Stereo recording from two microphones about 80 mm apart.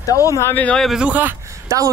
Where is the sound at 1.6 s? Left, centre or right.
Right.